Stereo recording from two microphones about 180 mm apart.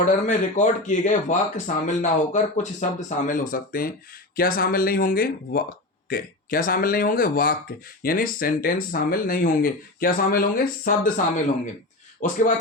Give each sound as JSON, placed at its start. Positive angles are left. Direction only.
{"t": 0.0, "sound": "speech", "side_deg": 45}